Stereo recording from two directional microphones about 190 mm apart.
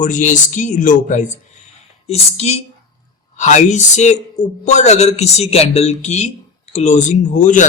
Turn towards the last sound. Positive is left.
turn(degrees=40)  # may be behind; listen again after turning